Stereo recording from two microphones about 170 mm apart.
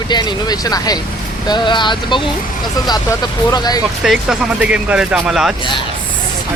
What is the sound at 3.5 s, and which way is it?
Speech, 25° left (ahead or behind).